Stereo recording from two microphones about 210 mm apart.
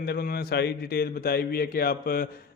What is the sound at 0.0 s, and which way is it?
A man's voice, 45° left (ahead or behind).